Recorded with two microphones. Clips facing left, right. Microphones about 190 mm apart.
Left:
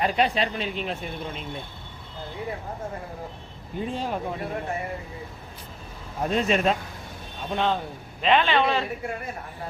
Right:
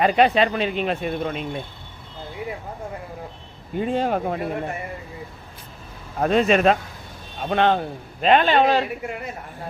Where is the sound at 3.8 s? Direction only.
65° right (ahead or behind).